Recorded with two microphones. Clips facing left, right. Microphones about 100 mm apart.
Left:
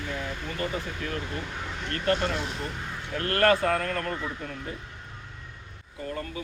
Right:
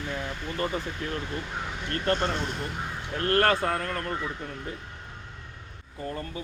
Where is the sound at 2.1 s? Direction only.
5° left (ahead or behind).